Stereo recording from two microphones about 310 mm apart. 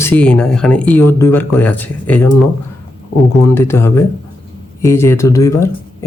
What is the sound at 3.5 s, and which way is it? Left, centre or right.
Speech, centre.